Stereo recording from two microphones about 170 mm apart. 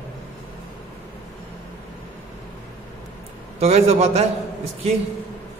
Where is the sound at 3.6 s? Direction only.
40° right (ahead or behind).